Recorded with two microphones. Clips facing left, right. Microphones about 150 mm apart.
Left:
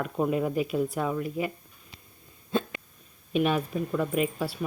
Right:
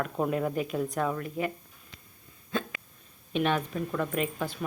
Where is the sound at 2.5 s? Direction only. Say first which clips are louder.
Left 4 dB; 25° left (ahead or behind).